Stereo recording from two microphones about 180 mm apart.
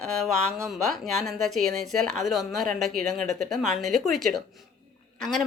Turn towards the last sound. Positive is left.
turn(degrees=0)  # may be behind; listen again after turning